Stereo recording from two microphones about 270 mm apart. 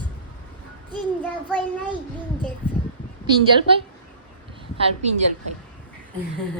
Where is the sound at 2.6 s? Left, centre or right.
Centre.